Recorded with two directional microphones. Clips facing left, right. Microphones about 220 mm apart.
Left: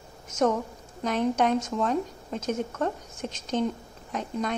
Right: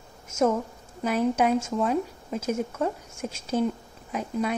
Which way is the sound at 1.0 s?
5° right (ahead or behind).